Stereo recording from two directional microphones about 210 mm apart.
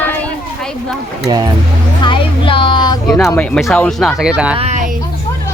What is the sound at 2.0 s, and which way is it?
Speech, 25° left (ahead or behind).